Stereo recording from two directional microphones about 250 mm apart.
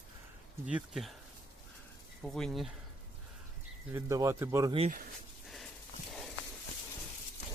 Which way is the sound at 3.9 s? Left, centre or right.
Centre.